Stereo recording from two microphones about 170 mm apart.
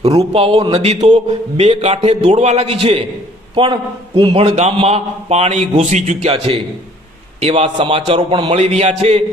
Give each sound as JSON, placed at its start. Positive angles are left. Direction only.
{"t": 0.2, "sound": "a man's voice", "side_deg": -35}